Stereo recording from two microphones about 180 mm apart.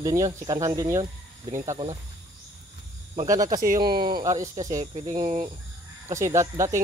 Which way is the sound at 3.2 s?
20° right (ahead or behind).